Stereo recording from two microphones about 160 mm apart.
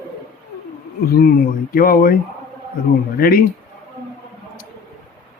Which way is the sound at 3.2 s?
65° left (ahead or behind).